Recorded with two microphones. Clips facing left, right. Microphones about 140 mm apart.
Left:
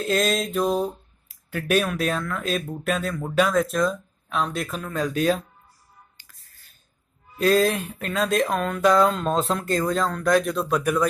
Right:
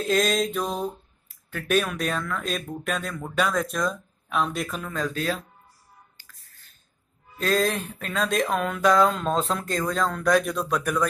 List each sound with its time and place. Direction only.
0.0 s speech: centre (ahead or behind)
4.9 s speech: 15° left (ahead or behind)
6.2 s a sound: 20° left (ahead or behind)
7.3 s speech: 5° left (ahead or behind)